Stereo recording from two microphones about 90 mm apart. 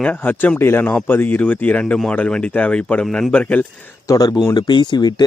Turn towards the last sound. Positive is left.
turn(degrees=50)  # may be behind; listen again after turning